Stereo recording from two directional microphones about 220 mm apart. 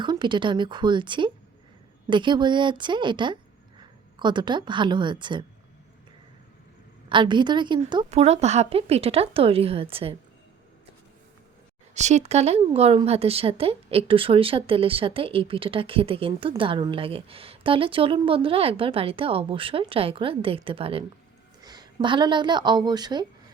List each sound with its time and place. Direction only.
0.0 s a woman's voice: 20° right (ahead or behind)
7.1 s a woman's voice: 20° right (ahead or behind)
11.9 s a woman's voice: 30° right (ahead or behind)